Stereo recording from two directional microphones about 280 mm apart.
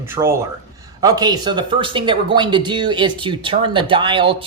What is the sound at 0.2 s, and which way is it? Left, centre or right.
Speech, centre.